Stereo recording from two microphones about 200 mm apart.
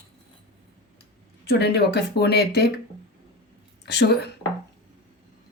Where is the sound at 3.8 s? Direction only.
55° left (ahead or behind).